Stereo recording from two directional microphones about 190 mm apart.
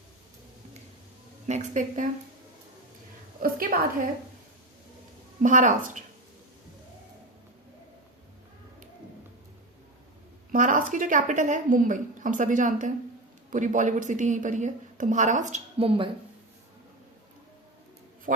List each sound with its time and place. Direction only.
1.5 s a woman's voice: 40° right (ahead or behind)
3.4 s a woman's voice: 50° right (ahead or behind)
5.4 s a woman's voice: 45° right (ahead or behind)
10.5 s a woman's voice: 45° right (ahead or behind)
18.3 s speech: 50° right (ahead or behind)